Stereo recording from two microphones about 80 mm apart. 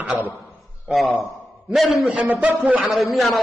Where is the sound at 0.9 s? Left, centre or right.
Centre.